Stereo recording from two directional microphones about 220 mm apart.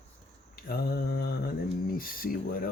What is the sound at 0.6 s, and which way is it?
Mantra, 45° left (ahead or behind).